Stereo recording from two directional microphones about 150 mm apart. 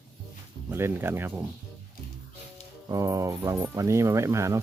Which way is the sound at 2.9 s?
20° right (ahead or behind).